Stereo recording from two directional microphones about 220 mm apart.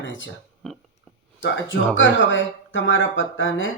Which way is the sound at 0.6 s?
Centre (ahead or behind).